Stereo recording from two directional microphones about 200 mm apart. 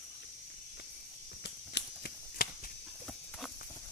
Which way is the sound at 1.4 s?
55° left (ahead or behind).